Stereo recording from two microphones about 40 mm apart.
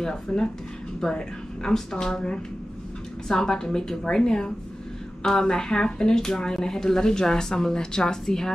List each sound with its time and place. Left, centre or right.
0.0 s speech: centre